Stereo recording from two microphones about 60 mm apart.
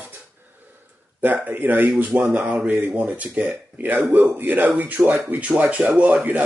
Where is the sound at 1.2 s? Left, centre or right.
Right.